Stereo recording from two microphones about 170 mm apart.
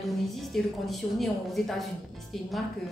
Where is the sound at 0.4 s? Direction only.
Centre (ahead or behind).